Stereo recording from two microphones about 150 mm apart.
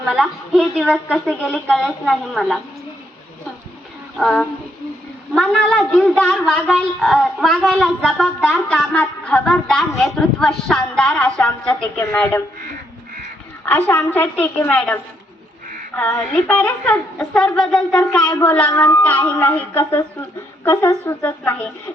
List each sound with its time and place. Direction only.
0.0 s a man's voice: centre (ahead or behind)
4.2 s a man's voice: 5° left (ahead or behind)
5.5 s a man's voice: 5° left (ahead or behind)
13.7 s a woman's voice: 10° left (ahead or behind)
16.0 s a woman's voice: 15° left (ahead or behind)